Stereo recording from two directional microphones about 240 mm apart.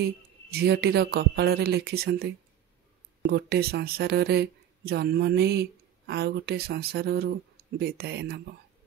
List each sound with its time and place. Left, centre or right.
0.5 s speech: right